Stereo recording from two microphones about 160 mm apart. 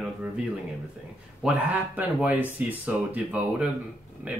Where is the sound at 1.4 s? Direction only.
10° right (ahead or behind).